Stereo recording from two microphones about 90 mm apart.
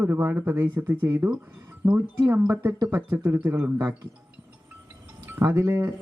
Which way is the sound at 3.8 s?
50° right (ahead or behind).